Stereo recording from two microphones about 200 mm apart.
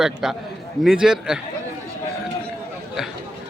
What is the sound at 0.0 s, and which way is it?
A man's voice, centre (ahead or behind).